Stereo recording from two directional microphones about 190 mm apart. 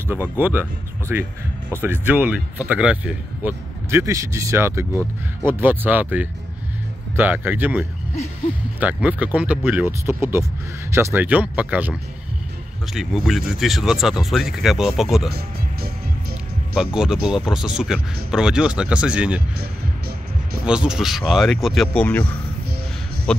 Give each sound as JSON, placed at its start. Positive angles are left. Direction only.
{"t": 0.1, "sound": "speech", "side_deg": -10}
{"t": 15.3, "sound": "music", "side_deg": -55}
{"t": 16.7, "sound": "speech", "side_deg": -5}
{"t": 20.6, "sound": "speech", "side_deg": -5}